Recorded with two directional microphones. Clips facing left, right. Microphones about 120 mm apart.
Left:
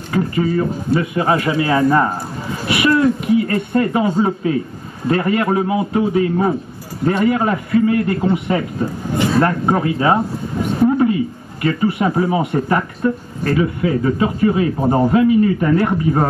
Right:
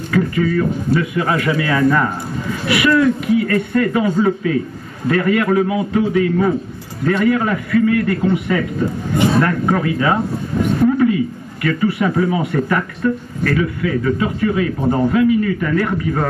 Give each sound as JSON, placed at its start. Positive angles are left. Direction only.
{"t": 0.1, "sound": "speech", "side_deg": 30}